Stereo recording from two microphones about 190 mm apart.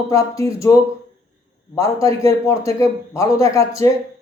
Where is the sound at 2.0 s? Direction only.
15° left (ahead or behind).